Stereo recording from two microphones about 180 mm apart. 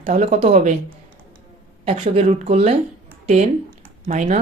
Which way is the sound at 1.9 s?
30° right (ahead or behind).